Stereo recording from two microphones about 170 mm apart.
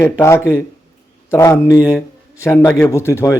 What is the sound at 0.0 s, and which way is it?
A man's voice, 15° left (ahead or behind).